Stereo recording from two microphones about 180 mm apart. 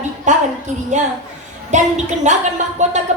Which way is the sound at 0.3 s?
40° right (ahead or behind).